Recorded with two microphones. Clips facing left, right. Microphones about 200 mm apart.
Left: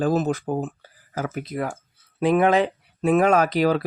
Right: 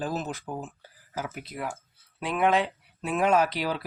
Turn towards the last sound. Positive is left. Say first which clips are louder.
# left 6 dB
turn(degrees=45)  # may be behind; listen again after turning